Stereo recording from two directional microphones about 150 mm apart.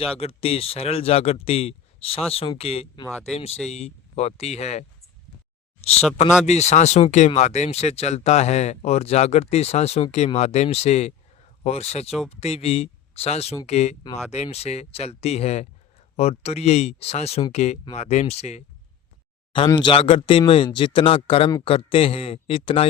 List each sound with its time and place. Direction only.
0.0 s speech: 40° left (ahead or behind)
6.4 s speech: 45° left (ahead or behind)
19.5 s speech: 30° left (ahead or behind)